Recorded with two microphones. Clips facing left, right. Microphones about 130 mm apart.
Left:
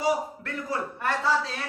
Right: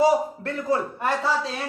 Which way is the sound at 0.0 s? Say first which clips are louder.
Right 7 dB; 30° right (ahead or behind).